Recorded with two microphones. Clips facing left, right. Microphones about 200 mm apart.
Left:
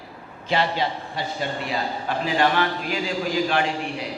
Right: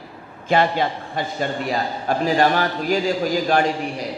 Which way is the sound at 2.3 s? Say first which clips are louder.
Right 2 dB; 40° right (ahead or behind).